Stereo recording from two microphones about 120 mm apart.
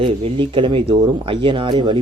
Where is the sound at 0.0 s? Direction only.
45° right (ahead or behind).